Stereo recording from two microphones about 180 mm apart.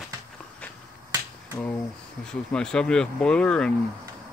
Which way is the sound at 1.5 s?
15° left (ahead or behind).